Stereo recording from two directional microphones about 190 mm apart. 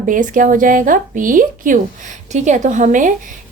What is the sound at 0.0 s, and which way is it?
A woman's voice, 45° right (ahead or behind).